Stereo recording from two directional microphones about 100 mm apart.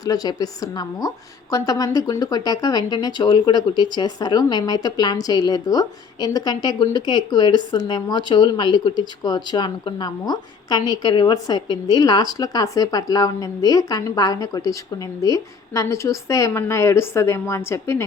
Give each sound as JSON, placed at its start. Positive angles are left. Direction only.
{"t": 0.0, "sound": "a woman's voice", "side_deg": 40}